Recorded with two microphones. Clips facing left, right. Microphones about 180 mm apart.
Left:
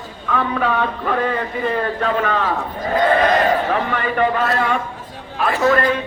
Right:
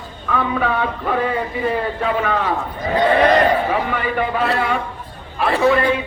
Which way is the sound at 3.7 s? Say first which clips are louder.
Even; 5° right (ahead or behind).